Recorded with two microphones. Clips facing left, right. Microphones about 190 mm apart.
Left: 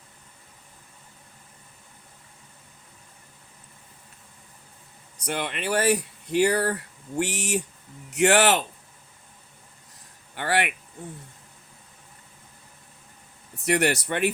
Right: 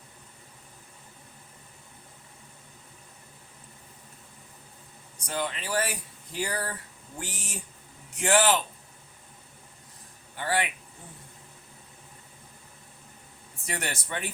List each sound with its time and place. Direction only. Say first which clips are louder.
5.2 s speech: left 3 dB; 70° left (ahead or behind)
10.3 s speech: left 3 dB; 70° left (ahead or behind)
13.7 s speech: left 11 dB; 70° left (ahead or behind)